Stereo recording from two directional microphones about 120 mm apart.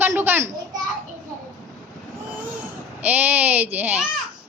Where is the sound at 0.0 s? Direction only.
15° right (ahead or behind).